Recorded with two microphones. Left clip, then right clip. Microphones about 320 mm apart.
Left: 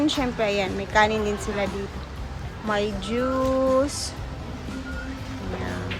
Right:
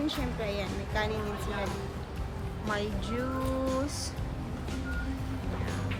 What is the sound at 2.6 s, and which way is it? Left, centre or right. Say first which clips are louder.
Speech: left 8 dB; centre.